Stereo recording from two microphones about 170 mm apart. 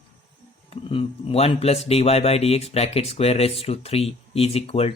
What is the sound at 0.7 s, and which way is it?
Speech, 35° left (ahead or behind).